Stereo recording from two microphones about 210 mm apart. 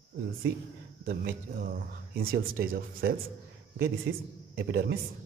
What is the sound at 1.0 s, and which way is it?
Speech, 45° right (ahead or behind).